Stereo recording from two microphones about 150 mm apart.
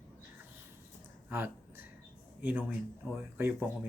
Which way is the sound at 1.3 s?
15° right (ahead or behind).